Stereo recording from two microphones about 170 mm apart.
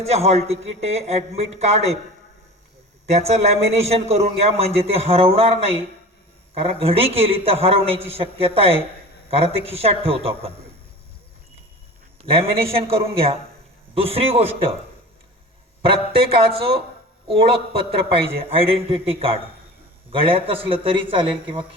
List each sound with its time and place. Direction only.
0.0 s a man's voice: 40° right (ahead or behind)
3.1 s a man's voice: 40° right (ahead or behind)
12.2 s a man's voice: 35° right (ahead or behind)
15.8 s a man's voice: 35° right (ahead or behind)